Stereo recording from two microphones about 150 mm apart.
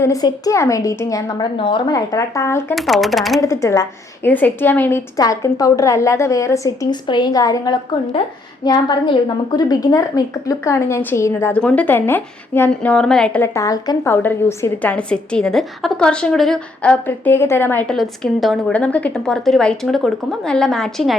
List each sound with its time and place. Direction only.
0.0 s a woman's voice: 25° left (ahead or behind)
1.5 s a woman's voice: 35° left (ahead or behind); by 2.7 s 15° left (ahead or behind)
2.7 s a woman's voice: centre (ahead or behind)
3.4 s a woman's voice: 20° left (ahead or behind)
13.5 s a woman's voice: 20° left (ahead or behind)
17.9 s a woman's voice: centre (ahead or behind)